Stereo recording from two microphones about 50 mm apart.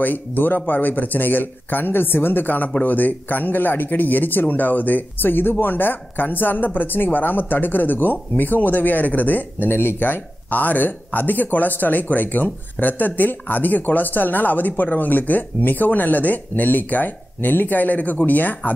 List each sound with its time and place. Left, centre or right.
0.0 s speech: left
9.7 s speech: left